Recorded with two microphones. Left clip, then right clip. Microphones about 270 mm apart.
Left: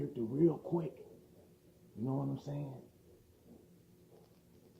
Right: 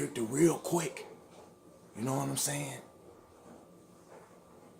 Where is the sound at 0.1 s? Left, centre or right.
Right.